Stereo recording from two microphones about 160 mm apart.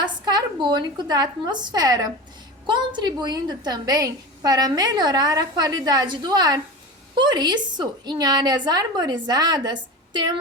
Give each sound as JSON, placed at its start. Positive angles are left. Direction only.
{"t": 0.0, "sound": "a woman's voice", "side_deg": -25}